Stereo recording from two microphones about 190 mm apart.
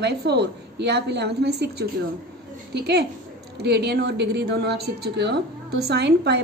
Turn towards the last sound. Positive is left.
turn(degrees=-60)  # may be behind; listen again after turning